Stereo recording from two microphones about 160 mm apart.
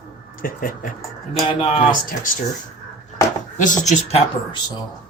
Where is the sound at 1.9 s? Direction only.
60° left (ahead or behind).